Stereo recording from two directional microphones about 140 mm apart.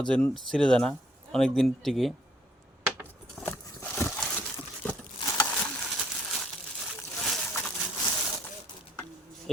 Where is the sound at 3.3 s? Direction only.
10° left (ahead or behind).